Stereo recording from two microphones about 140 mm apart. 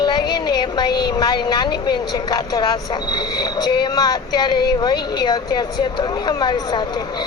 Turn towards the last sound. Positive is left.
turn(degrees=30)  # may be behind; listen again after turning